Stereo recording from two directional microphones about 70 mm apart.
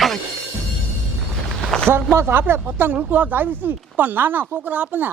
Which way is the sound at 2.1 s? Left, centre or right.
Right.